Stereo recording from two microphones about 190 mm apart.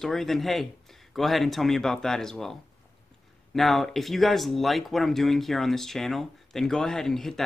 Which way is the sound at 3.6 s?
Centre (ahead or behind).